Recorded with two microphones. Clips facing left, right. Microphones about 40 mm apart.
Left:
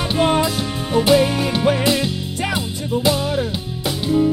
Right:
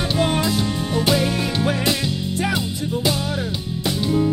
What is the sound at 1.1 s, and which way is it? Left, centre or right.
Music, left.